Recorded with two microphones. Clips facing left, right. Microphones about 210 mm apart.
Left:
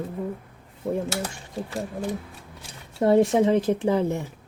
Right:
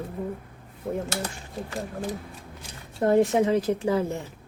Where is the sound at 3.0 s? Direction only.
15° left (ahead or behind).